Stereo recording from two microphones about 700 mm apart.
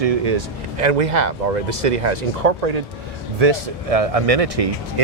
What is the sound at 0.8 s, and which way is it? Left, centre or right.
Speech, right.